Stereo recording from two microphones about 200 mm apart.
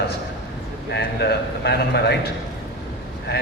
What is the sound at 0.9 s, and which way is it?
A man's voice, 55° left (ahead or behind).